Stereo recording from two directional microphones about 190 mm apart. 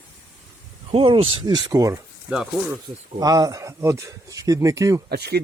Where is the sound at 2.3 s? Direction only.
5° right (ahead or behind).